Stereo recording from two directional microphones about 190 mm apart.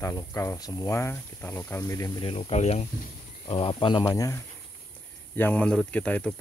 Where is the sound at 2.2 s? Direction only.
30° left (ahead or behind).